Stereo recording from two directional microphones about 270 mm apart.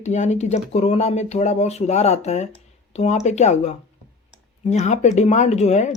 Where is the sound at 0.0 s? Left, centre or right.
Left.